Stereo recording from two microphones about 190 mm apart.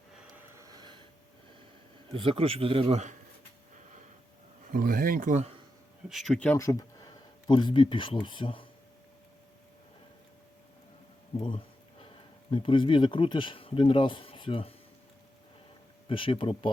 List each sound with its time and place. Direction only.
0.5 s gasp: 20° right (ahead or behind)
2.1 s a man's voice: 30° right (ahead or behind)
4.7 s speech: 50° right (ahead or behind)
6.1 s speech: centre (ahead or behind); by 8.6 s 25° left (ahead or behind)
11.3 s speech: 25° left (ahead or behind)
16.0 s speech: 25° left (ahead or behind)